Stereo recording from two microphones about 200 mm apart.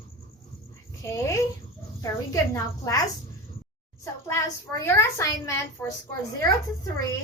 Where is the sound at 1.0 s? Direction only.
15° left (ahead or behind).